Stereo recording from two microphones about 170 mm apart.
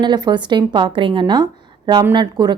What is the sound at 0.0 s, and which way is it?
Speech, 25° right (ahead or behind).